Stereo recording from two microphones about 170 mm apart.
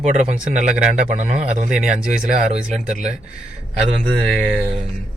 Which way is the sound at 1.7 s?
5° right (ahead or behind).